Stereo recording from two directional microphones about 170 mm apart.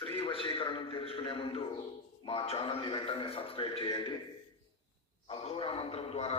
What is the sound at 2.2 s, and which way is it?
A man's voice, 35° left (ahead or behind).